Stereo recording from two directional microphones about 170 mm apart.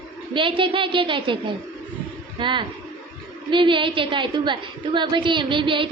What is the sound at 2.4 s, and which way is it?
Music, 30° right (ahead or behind).